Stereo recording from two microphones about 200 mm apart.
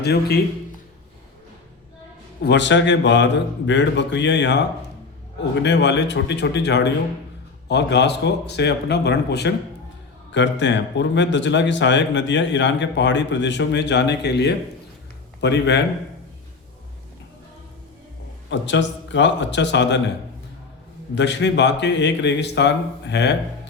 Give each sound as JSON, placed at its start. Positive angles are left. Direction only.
{"t": 0.0, "sound": "a man's voice", "side_deg": 55}
{"t": 2.4, "sound": "a man's voice", "side_deg": 60}
{"t": 5.6, "sound": "a man's voice", "side_deg": 60}
{"t": 18.5, "sound": "a man's voice", "side_deg": 65}
{"t": 21.2, "sound": "a man's voice", "side_deg": 60}